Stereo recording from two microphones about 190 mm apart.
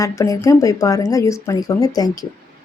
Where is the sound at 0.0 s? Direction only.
15° left (ahead or behind).